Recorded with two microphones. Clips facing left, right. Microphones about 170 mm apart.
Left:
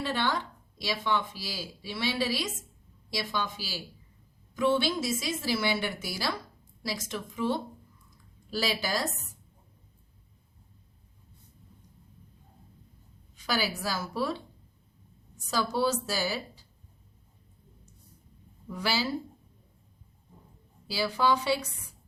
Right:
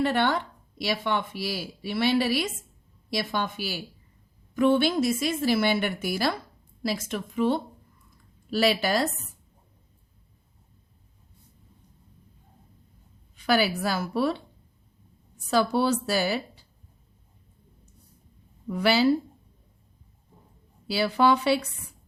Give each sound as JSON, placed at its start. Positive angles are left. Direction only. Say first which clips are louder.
{"t": 0.0, "sound": "speech", "louder": "right 6 dB", "side_deg": -60}
{"t": 13.3, "sound": "speech", "louder": "right 7 dB", "side_deg": -60}
{"t": 18.7, "sound": "speech", "louder": "right 8 dB", "side_deg": -60}
{"t": 20.8, "sound": "speech", "louder": "right 5 dB", "side_deg": -65}